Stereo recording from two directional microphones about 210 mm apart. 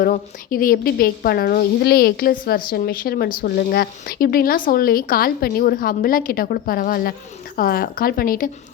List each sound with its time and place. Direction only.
0.0 s speech: 40° left (ahead or behind)